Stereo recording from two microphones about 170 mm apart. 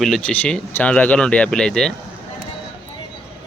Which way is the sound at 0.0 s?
5° left (ahead or behind).